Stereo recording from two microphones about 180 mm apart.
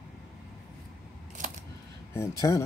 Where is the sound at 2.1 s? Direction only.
15° left (ahead or behind).